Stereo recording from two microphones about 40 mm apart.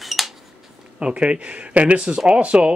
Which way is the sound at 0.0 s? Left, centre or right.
Centre.